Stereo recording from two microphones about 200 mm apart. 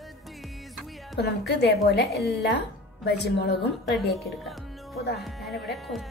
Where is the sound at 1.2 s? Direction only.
55° left (ahead or behind).